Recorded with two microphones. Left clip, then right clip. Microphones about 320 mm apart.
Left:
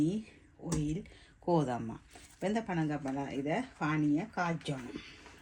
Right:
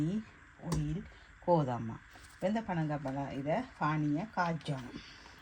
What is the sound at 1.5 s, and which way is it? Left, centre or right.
Speech, right.